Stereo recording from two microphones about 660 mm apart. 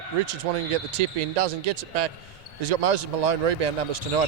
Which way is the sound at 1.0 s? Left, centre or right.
Right.